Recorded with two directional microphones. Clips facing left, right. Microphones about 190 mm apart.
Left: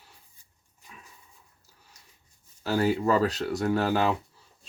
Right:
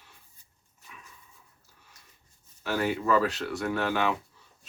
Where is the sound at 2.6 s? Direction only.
35° left (ahead or behind).